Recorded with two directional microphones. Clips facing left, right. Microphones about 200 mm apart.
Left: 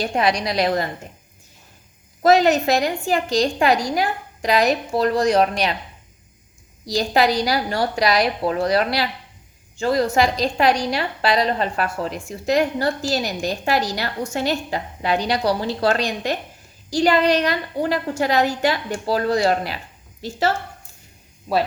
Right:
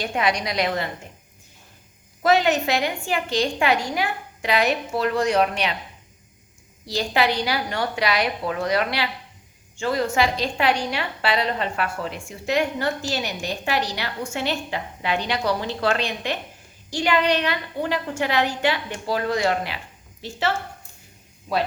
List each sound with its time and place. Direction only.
0.0 s a woman's voice: 35° left (ahead or behind)
2.2 s a woman's voice: 40° left (ahead or behind)
6.8 s a woman's voice: 40° left (ahead or behind)
21.5 s speech: 45° left (ahead or behind)